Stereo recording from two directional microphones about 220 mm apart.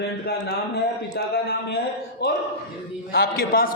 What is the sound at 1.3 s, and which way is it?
Speech, 45° left (ahead or behind).